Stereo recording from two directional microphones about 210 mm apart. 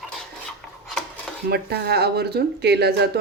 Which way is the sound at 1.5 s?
50° right (ahead or behind).